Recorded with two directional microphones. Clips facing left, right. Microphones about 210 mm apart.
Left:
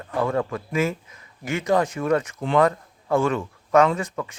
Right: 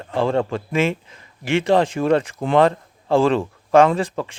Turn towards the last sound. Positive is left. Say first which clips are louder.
# right 4 dB
turn(degrees=-30)  # may be behind; listen again after turning